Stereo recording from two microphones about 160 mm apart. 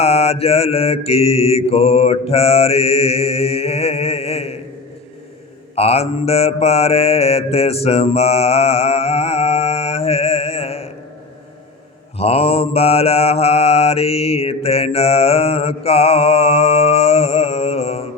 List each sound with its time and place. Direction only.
0.0 s mantra: 40° left (ahead or behind)
5.7 s mantra: 40° left (ahead or behind)
12.1 s mantra: 40° left (ahead or behind)